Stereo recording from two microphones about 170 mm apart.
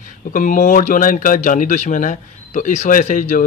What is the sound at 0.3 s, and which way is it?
A man's voice, 50° left (ahead or behind).